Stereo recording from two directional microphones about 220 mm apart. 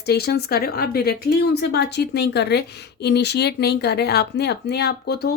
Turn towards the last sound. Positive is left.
turn(degrees=45)  # may be behind; listen again after turning